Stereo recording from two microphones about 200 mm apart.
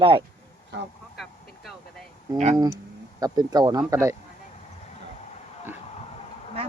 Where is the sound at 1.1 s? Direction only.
Centre (ahead or behind).